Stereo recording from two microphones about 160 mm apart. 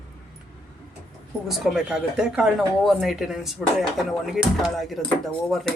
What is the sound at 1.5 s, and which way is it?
Speech, centre (ahead or behind).